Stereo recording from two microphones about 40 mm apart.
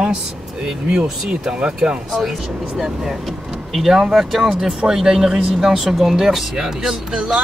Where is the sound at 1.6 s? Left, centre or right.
Centre.